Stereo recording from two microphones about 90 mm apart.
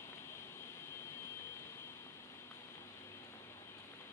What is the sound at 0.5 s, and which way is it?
Vehicle, 30° left (ahead or behind).